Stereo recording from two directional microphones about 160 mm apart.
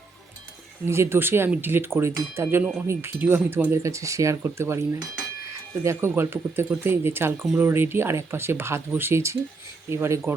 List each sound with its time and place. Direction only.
0.9 s speech: 15° right (ahead or behind)